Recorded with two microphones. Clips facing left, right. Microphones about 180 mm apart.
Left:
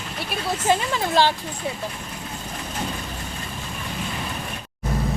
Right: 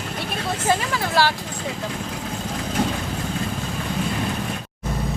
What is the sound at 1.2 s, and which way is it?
Speech, 20° left (ahead or behind).